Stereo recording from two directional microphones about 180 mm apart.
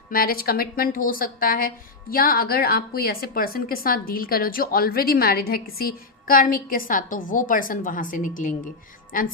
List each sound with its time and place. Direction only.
0.1 s a woman's voice: 55° left (ahead or behind)